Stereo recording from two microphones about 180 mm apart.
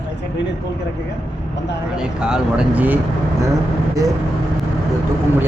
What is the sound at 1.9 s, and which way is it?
Speech, 5° right (ahead or behind).